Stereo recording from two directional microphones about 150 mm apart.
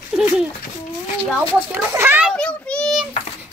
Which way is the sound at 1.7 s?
15° right (ahead or behind).